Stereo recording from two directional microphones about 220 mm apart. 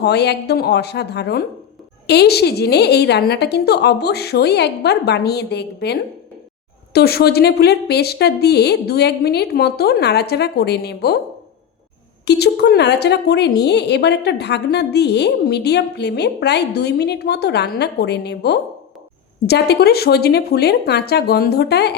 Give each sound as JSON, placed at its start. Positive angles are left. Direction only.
{"t": 0.0, "sound": "a woman's voice", "side_deg": 50}
{"t": 12.2, "sound": "a woman's voice", "side_deg": 50}